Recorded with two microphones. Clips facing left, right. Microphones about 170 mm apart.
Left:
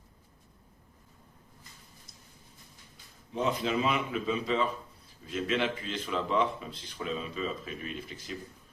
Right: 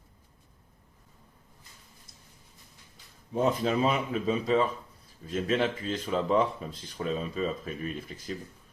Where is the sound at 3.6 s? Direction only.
45° right (ahead or behind).